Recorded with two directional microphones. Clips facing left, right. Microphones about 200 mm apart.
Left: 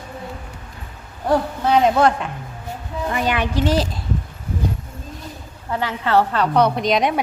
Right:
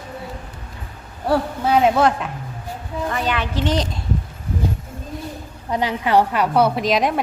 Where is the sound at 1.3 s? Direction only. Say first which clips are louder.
Left 1 dB; 5° right (ahead or behind).